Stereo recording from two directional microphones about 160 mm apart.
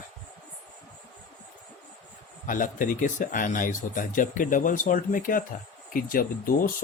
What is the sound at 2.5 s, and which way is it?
Speech, 55° left (ahead or behind).